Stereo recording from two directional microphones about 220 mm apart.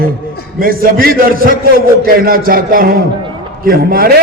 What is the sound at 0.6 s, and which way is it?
A man's voice, 40° right (ahead or behind).